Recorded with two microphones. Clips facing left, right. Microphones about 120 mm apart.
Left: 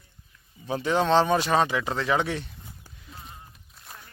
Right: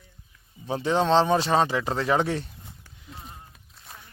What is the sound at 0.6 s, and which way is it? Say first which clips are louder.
Speech: right 1 dB; 30° right (ahead or behind).